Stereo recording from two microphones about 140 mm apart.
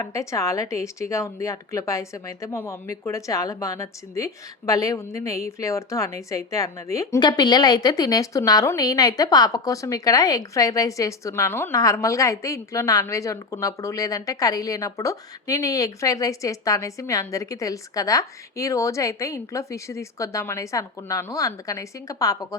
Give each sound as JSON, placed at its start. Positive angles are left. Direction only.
{"t": 0.0, "sound": "speech", "side_deg": 20}